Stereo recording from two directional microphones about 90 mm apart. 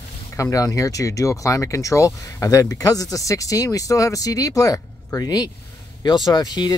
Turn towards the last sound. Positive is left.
turn(degrees=50)  # may be behind; listen again after turning